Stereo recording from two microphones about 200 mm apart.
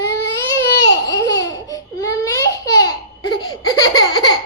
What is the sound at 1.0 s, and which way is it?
Laughter, 15° left (ahead or behind).